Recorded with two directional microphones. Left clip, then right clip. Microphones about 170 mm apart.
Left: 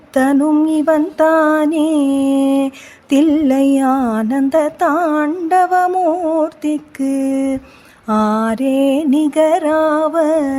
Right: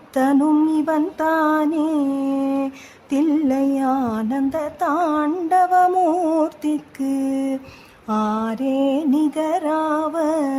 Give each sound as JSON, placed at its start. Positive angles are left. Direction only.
{"t": 0.1, "sound": "female singing", "side_deg": 20}
{"t": 0.7, "sound": "music", "side_deg": 20}
{"t": 6.0, "sound": "music", "side_deg": 0}
{"t": 6.4, "sound": "music", "side_deg": 15}